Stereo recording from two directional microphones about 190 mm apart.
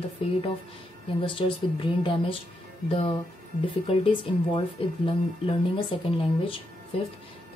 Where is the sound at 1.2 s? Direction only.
25° left (ahead or behind).